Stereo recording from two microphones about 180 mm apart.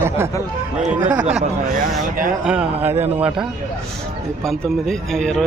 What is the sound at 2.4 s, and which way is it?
A man's voice, 5° right (ahead or behind).